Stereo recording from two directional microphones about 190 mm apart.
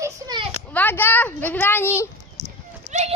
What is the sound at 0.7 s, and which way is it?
A woman's voice, 10° left (ahead or behind).